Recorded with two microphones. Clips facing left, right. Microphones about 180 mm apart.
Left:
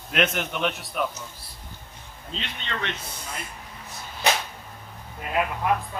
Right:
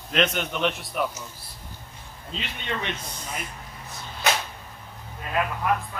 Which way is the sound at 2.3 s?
10° right (ahead or behind).